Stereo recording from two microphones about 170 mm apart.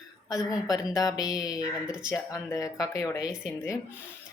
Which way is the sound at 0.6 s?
20° left (ahead or behind).